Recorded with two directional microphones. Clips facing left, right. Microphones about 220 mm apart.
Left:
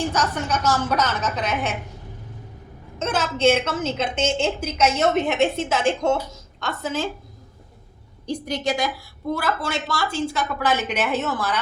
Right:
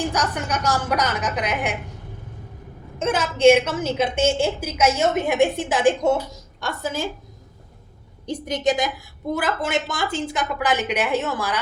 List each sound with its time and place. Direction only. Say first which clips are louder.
0.1 s a woman's voice: left 1 dB; 15° right (ahead or behind)
3.0 s a woman's voice: right 4 dB; 10° right (ahead or behind)
8.3 s a woman's voice: right 2 dB; 20° right (ahead or behind)